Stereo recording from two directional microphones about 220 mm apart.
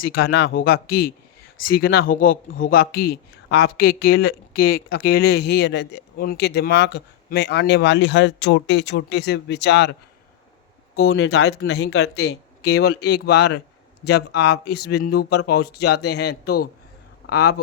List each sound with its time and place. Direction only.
0.2 s speech: 55° left (ahead or behind)
1.7 s speech: 45° left (ahead or behind)
11.0 s speech: 70° left (ahead or behind)
12.8 s speech: 50° left (ahead or behind)